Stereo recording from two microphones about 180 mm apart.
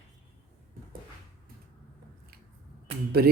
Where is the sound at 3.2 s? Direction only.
60° right (ahead or behind).